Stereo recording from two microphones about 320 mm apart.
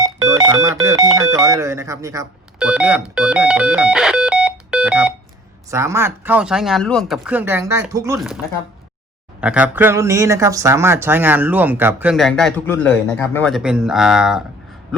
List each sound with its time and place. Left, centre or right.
0.0 s speech: centre
9.4 s speech: centre